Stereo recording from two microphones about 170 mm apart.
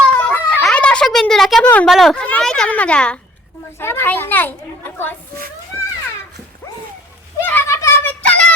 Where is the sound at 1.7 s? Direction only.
10° left (ahead or behind).